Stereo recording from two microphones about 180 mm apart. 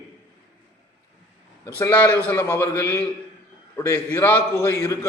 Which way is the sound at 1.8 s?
10° left (ahead or behind).